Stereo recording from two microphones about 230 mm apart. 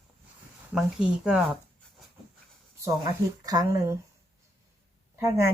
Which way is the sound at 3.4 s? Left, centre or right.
Centre.